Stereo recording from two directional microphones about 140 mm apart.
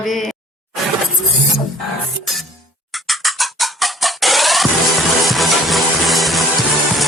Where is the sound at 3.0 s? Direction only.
Centre (ahead or behind).